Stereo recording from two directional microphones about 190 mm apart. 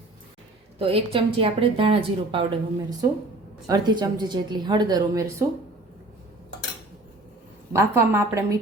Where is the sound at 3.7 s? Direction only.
20° right (ahead or behind).